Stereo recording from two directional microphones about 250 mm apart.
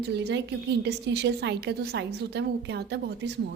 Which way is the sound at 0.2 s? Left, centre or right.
Right.